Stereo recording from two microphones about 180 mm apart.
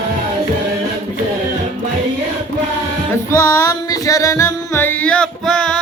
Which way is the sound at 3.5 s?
15° left (ahead or behind).